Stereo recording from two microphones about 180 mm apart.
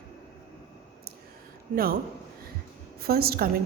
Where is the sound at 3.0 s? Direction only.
60° right (ahead or behind).